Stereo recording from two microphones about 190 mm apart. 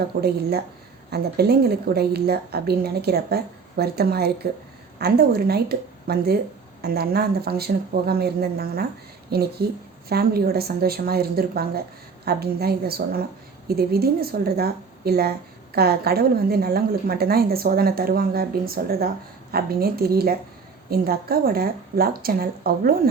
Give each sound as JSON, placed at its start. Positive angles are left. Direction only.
{"t": 0.0, "sound": "a woman's voice", "side_deg": -55}